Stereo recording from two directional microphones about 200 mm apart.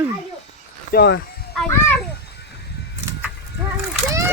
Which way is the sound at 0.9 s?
55° left (ahead or behind).